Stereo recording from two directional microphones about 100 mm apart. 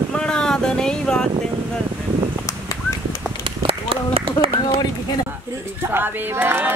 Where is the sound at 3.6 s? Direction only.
65° right (ahead or behind).